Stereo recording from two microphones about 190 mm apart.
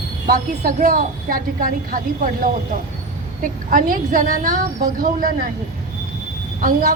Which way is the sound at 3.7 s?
45° right (ahead or behind).